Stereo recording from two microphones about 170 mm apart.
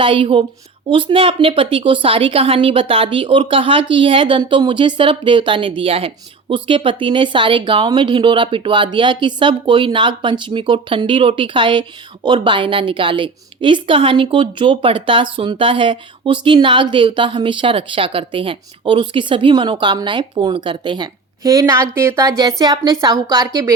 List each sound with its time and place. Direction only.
0.0 s a woman's voice: 30° right (ahead or behind)